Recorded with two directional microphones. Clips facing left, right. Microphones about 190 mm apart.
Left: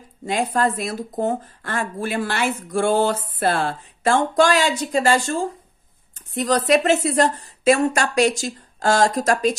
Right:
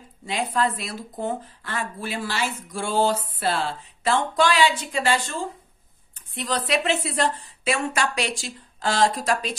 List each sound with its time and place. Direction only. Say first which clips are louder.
0.2 s speech: left 4 dB; 45° left (ahead or behind)